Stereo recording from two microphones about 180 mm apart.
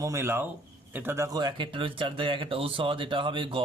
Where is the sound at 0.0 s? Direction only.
15° right (ahead or behind).